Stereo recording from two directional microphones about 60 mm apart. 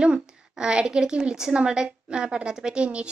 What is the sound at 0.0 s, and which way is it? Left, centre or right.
Speech, centre.